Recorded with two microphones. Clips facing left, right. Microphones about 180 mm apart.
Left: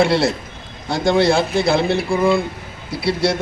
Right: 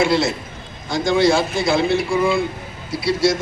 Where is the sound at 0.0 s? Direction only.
60° left (ahead or behind).